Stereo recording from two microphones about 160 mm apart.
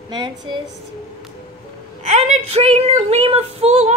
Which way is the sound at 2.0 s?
45° right (ahead or behind).